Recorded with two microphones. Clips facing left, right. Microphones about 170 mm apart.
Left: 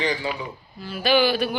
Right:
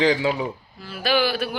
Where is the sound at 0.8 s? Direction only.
Centre (ahead or behind).